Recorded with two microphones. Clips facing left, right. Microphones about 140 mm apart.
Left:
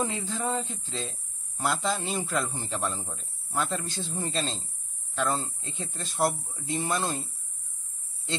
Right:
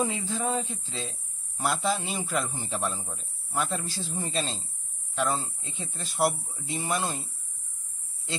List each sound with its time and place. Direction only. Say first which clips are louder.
0.0 s a man's voice: right 1 dB; centre (ahead or behind)